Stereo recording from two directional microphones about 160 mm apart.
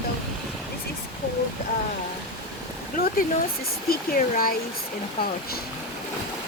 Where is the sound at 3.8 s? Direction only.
65° left (ahead or behind).